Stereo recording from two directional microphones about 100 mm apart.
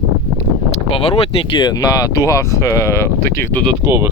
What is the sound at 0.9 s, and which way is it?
Speech, 65° left (ahead or behind).